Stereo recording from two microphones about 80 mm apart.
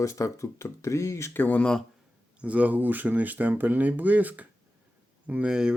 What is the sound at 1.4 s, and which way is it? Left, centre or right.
Speech, centre.